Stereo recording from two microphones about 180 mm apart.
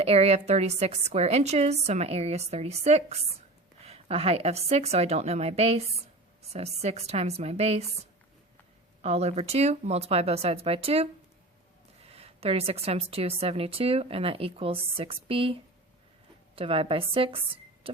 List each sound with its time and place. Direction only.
0.0 s a woman's voice: 35° right (ahead or behind)
9.0 s a woman's voice: 35° right (ahead or behind)
12.1 s a woman's voice: 35° right (ahead or behind)
16.6 s a woman's voice: 30° right (ahead or behind)